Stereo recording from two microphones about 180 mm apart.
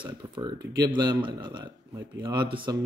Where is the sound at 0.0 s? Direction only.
25° right (ahead or behind).